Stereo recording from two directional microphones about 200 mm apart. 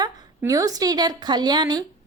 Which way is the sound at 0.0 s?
20° right (ahead or behind).